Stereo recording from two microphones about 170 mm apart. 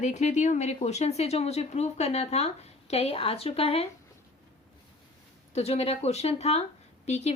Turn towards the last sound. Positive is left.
turn(degrees=40)  # may be behind; listen again after turning